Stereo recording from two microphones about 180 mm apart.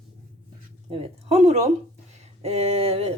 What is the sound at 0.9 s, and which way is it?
Speech, 35° right (ahead or behind).